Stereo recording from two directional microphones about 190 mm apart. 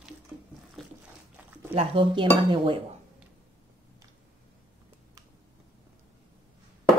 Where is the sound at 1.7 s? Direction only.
30° right (ahead or behind).